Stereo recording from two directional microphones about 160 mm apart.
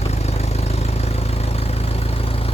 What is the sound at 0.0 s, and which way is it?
Vehicle, 40° left (ahead or behind).